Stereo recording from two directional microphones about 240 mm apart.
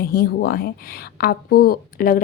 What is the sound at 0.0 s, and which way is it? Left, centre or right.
Speech, left.